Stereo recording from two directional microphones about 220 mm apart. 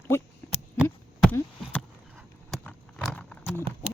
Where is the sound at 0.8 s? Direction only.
10° left (ahead or behind).